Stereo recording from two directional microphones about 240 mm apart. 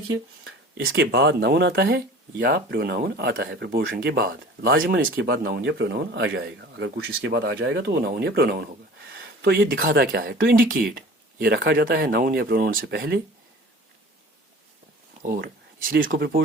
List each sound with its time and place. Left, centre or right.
0.8 s speech: right
15.2 s speech: right